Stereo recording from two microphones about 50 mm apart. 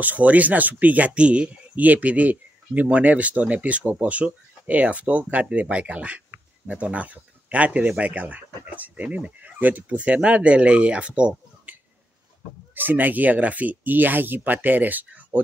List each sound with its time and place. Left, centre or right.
0.0 s speech: right
12.7 s speech: right